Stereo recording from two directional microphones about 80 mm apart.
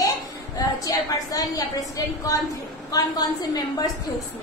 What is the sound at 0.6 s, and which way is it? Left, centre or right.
A woman's voice, left.